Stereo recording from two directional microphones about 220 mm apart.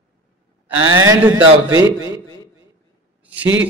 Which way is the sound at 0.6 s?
10° right (ahead or behind).